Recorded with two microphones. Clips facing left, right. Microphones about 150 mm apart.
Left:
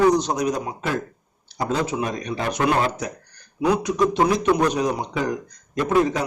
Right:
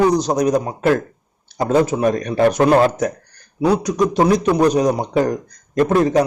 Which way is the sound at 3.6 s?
35° right (ahead or behind).